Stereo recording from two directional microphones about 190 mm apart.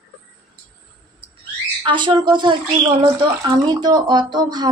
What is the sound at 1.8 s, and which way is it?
Speech, 25° right (ahead or behind).